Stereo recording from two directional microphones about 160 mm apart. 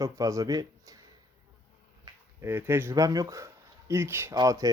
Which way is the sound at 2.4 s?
15° right (ahead or behind).